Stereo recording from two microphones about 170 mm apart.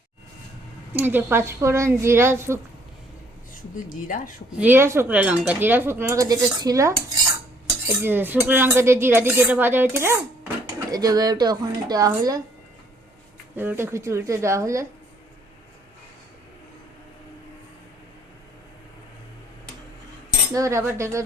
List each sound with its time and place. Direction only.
0.9 s speech: 10° right (ahead or behind)
3.8 s speech: 50° left (ahead or behind)
4.5 s speech: 10° right (ahead or behind)
8.0 s speech: 10° right (ahead or behind)
13.6 s speech: 10° right (ahead or behind)
20.5 s speech: 20° right (ahead or behind)